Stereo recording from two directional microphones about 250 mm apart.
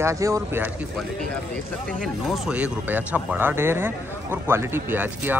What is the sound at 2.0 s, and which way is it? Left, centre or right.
Speech, centre.